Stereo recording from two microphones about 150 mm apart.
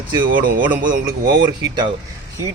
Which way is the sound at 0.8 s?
65° right (ahead or behind).